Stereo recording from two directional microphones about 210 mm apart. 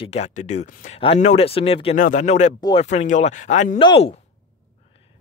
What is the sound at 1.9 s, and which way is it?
Speech, 35° left (ahead or behind).